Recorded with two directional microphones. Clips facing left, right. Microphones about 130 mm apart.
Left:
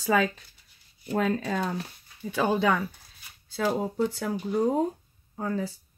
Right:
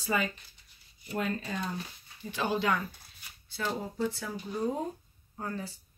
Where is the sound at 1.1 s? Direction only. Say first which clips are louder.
Left 7 dB; 90° left.